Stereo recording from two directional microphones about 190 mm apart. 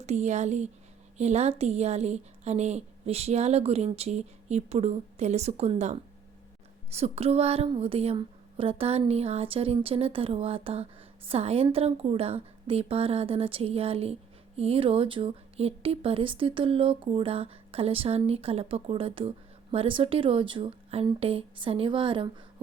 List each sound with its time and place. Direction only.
0.0 s a woman's voice: 35° right (ahead or behind)